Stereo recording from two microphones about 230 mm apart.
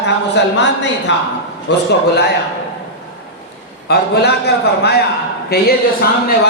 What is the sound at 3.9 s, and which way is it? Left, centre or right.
Speech, left.